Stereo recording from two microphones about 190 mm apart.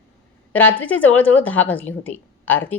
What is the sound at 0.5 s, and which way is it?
A woman's voice, 10° left (ahead or behind).